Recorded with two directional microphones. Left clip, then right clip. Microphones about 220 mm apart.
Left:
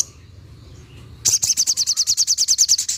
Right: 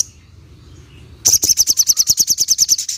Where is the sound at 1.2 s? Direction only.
Centre (ahead or behind).